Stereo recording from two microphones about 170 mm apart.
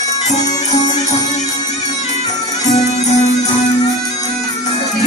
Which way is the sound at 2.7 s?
40° left (ahead or behind).